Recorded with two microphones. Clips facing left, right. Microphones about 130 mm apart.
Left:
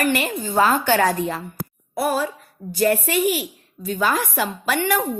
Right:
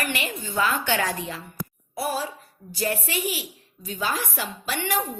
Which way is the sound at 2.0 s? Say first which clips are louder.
Left 6 dB; 55° left (ahead or behind).